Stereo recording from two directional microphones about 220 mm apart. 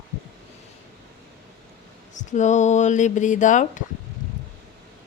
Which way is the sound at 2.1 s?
35° left (ahead or behind).